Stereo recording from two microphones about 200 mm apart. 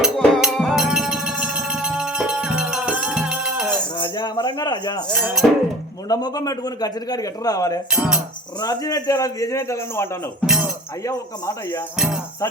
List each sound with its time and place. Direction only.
0.0 s music: centre (ahead or behind)
3.9 s rattle: 20° left (ahead or behind)
5.1 s music: 5° right (ahead or behind)
6.1 s a man's voice: 20° left (ahead or behind)
7.9 s speech: 5° right (ahead or behind)
8.6 s a man's voice: 20° left (ahead or behind)
10.4 s chink: 5° right (ahead or behind)
11.0 s a man's voice: 15° left (ahead or behind)
11.9 s speech: 5° right (ahead or behind)